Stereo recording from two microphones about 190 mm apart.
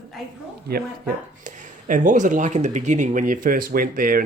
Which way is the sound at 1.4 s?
40° right (ahead or behind).